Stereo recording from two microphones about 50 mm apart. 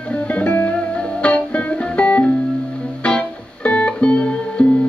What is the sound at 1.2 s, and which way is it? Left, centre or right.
Music, left.